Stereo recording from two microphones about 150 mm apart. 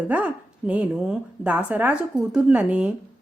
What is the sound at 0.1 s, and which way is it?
Speech, 10° right (ahead or behind).